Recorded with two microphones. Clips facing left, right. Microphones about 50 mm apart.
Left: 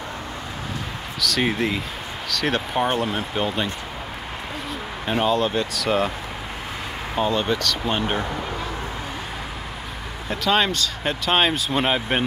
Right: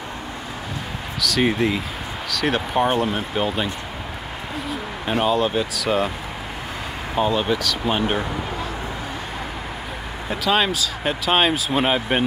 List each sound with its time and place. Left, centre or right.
1.2 s speech: centre
7.2 s speech: centre
10.3 s speech: centre